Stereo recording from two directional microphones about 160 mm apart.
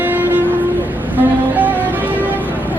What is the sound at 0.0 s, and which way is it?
Music, 10° right (ahead or behind).